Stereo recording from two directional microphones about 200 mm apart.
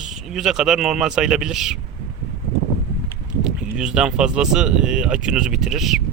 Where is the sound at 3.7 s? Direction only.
5° right (ahead or behind).